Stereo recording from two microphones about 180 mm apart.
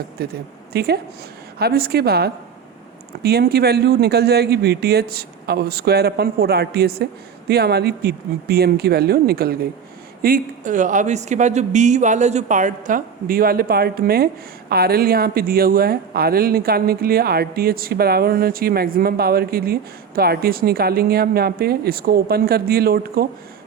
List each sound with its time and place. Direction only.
0.2 s speech: 60° right (ahead or behind)